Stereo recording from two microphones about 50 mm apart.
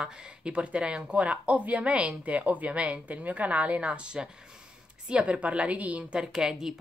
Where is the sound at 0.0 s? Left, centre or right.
Right.